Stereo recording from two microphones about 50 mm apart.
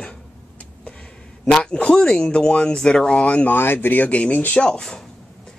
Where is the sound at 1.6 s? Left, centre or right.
Left.